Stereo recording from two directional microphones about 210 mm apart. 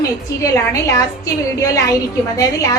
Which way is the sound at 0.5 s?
15° left (ahead or behind).